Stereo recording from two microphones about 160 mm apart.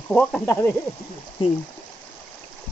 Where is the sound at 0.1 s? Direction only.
5° left (ahead or behind).